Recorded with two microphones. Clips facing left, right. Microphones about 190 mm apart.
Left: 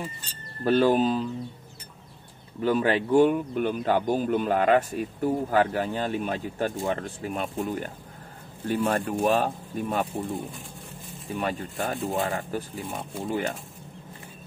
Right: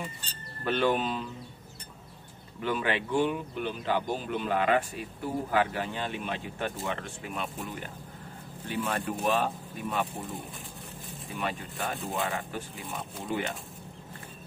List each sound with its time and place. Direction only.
0.7 s speech: 40° left (ahead or behind)
2.6 s speech: 40° left (ahead or behind)
11.3 s speech: 45° left (ahead or behind)